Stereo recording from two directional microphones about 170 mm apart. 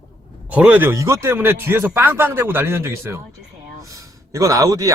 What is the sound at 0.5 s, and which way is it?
A man's voice, 10° right (ahead or behind).